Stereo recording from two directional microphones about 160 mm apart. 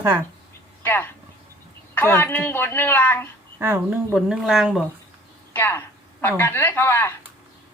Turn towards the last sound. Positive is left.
turn(degrees=15)  # may be behind; listen again after turning